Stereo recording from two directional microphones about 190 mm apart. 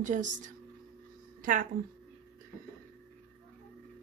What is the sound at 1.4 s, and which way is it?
Speech, 45° right (ahead or behind).